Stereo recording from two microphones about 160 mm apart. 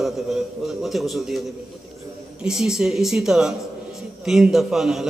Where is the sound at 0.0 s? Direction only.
Centre (ahead or behind).